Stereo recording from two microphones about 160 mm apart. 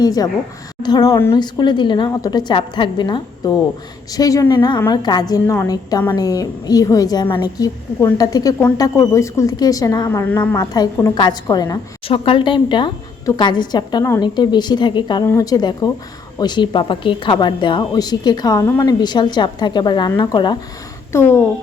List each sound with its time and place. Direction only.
0.0 s a woman's voice: 25° left (ahead or behind)
12.0 s a woman's voice: 35° left (ahead or behind)
21.1 s a woman's voice: 15° left (ahead or behind)